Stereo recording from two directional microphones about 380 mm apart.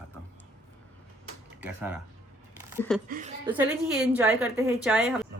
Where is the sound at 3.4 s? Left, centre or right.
Centre.